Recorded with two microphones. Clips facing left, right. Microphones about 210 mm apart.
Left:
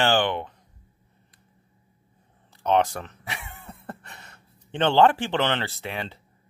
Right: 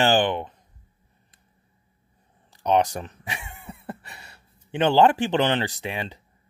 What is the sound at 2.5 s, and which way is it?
Speech, 15° right (ahead or behind).